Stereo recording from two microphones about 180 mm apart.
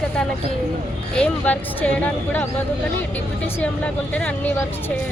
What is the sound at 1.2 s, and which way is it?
Speech, 5° left (ahead or behind).